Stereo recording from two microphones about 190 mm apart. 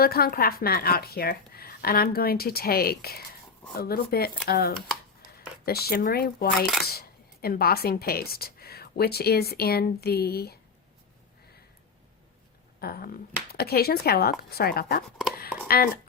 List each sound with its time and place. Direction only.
0.0 s a woman's voice: 55° left (ahead or behind)
12.8 s a woman's voice: 55° left (ahead or behind)